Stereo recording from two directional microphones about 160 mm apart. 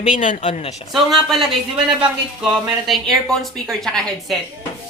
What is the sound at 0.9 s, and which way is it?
A woman's voice, centre (ahead or behind).